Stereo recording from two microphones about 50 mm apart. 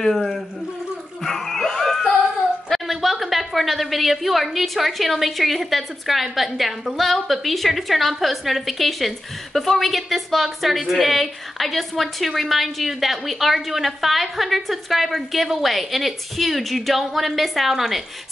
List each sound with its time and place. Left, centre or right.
0.0 s a woman's voice: centre
1.2 s a sound: centre
2.7 s a woman's voice: centre